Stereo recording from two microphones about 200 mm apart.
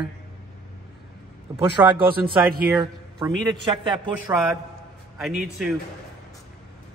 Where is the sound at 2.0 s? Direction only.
50° right (ahead or behind).